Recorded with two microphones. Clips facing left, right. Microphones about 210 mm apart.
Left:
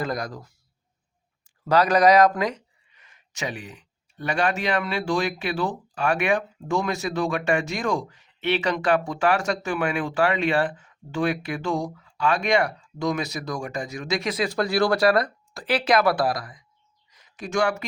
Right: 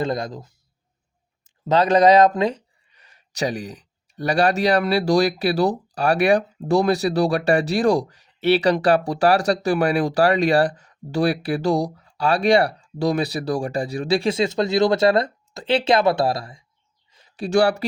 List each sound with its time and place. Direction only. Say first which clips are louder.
0.0 s speech: right 4 dB; 25° right (ahead or behind)
1.6 s speech: right 3 dB; 25° right (ahead or behind)
17.1 s a sound: right 8 dB; 30° right (ahead or behind)